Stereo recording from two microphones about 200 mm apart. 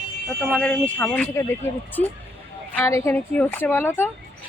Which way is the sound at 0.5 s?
5° left (ahead or behind).